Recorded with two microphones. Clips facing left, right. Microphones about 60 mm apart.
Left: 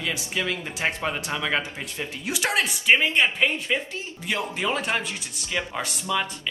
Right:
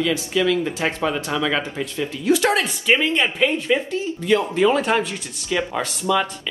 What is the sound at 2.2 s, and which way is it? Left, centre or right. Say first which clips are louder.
Speech: right 7 dB; centre.